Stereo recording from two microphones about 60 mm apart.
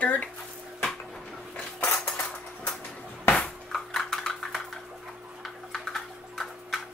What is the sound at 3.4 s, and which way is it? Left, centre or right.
Dishes, centre.